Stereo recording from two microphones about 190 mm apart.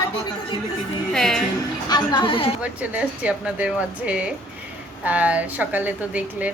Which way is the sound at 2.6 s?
5° right (ahead or behind).